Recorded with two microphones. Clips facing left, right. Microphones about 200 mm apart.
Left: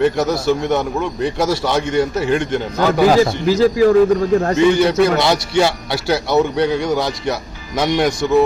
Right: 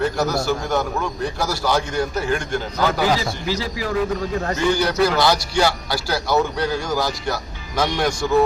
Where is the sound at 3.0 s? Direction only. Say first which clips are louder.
Left 9 dB; 45° left (ahead or behind).